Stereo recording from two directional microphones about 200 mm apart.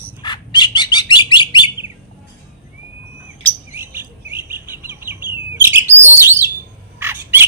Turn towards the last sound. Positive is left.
turn(degrees=-10)  # may be behind; listen again after turning